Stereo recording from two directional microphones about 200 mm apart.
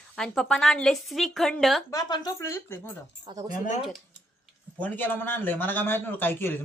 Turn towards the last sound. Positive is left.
turn(degrees=10)  # may be behind; listen again after turning